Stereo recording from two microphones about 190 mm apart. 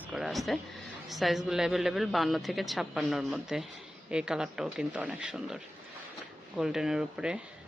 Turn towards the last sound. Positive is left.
turn(degrees=-5)  # may be behind; listen again after turning